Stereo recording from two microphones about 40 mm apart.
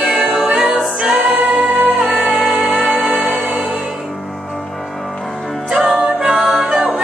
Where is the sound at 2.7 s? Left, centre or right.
Right.